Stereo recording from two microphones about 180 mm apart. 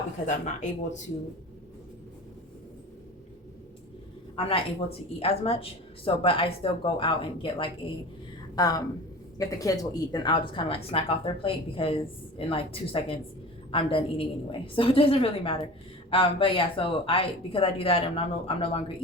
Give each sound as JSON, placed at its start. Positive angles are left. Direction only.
{"t": 0.3, "sound": "speech", "side_deg": 45}
{"t": 4.4, "sound": "speech", "side_deg": 30}